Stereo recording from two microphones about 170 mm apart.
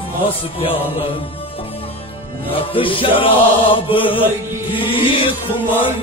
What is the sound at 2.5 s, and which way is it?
Chant, 30° left (ahead or behind).